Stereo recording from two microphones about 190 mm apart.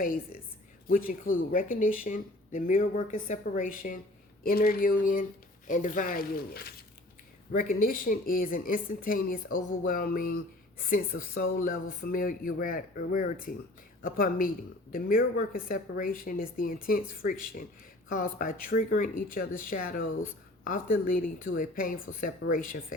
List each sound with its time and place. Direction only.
0.0 s speech: 45° left (ahead or behind)